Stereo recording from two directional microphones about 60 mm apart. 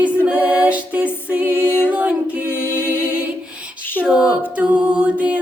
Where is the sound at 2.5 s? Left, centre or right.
Left.